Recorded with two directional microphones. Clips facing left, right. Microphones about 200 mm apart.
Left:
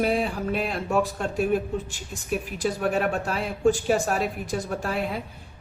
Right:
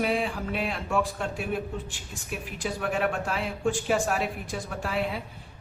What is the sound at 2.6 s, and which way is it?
A woman's voice, 40° left (ahead or behind).